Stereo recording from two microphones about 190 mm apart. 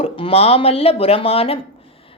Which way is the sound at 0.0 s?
30° left (ahead or behind).